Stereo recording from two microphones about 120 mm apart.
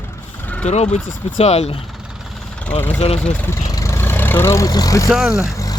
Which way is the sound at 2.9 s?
60° left (ahead or behind).